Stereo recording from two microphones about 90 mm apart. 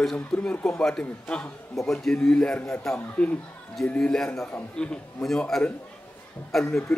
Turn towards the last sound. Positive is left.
turn(degrees=5)  # may be behind; listen again after turning